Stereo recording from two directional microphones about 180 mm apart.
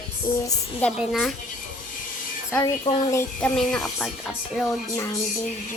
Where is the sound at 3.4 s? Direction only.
5° left (ahead or behind).